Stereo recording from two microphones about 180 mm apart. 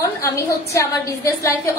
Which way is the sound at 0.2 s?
15° left (ahead or behind).